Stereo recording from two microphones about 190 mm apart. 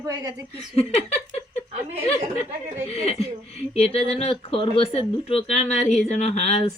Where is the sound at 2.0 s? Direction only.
30° left (ahead or behind).